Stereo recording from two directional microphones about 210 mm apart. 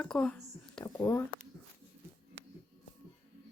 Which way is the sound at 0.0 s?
5° left (ahead or behind).